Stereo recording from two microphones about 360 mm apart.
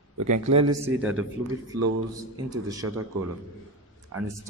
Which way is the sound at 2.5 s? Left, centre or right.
Centre.